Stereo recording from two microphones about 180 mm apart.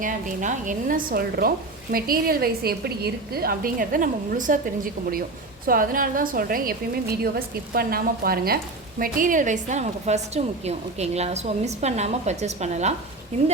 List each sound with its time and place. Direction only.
0.0 s a woman's voice: 45° right (ahead or behind)